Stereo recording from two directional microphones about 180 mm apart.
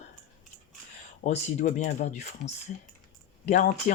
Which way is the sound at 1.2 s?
40° left (ahead or behind).